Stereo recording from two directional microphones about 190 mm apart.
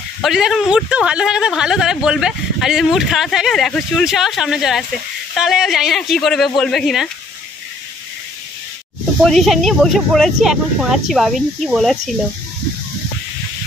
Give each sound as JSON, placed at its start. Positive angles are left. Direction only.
{"t": 0.2, "sound": "a man's voice", "side_deg": 0}
{"t": 9.2, "sound": "a man's voice", "side_deg": 0}